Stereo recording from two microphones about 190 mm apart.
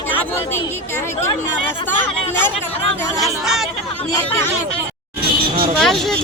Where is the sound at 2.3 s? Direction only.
10° left (ahead or behind).